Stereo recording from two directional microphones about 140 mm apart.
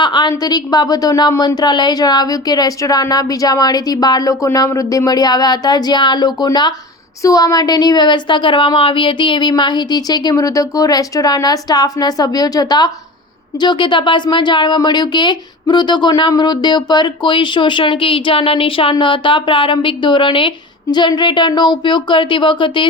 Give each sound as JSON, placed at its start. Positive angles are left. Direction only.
{"t": 0.0, "sound": "a woman's voice", "side_deg": 30}